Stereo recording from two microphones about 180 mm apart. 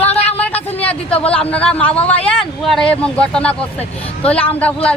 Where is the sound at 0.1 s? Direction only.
35° left (ahead or behind).